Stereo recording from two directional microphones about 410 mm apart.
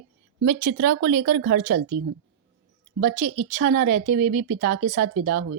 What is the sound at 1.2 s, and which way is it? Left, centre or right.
Speech, right.